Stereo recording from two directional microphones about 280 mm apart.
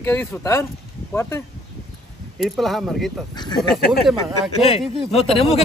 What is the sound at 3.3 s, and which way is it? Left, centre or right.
Speech, centre.